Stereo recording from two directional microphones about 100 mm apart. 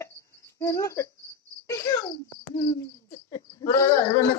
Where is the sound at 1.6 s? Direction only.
30° left (ahead or behind).